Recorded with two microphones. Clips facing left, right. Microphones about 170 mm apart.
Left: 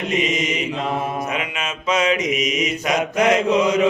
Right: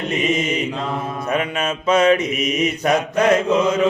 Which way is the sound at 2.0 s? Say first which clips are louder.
Right 3 dB; 55° right (ahead or behind).